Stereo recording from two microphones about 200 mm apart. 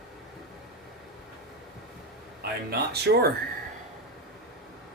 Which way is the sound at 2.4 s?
50° right (ahead or behind).